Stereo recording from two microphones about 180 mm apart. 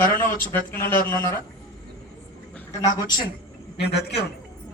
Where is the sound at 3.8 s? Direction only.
65° left (ahead or behind).